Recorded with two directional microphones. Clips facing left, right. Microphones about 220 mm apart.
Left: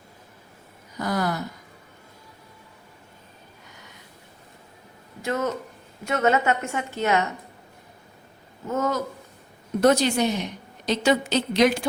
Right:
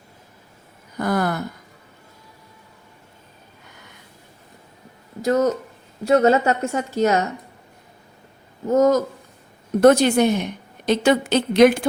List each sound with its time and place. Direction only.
0.9 s a sound: 55° right (ahead or behind)
5.2 s a woman's voice: 40° right (ahead or behind)
8.6 s a woman's voice: 40° right (ahead or behind)
9.8 s a woman's voice: 55° right (ahead or behind)